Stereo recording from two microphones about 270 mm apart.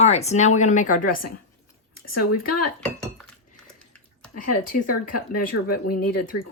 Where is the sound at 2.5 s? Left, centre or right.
Left.